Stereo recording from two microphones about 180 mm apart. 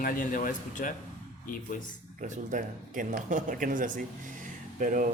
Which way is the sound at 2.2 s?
45° right (ahead or behind).